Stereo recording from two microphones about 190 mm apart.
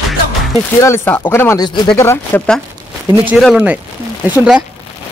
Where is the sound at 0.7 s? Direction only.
15° left (ahead or behind).